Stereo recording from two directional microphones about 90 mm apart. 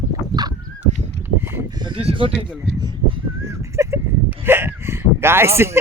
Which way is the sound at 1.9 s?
85° right.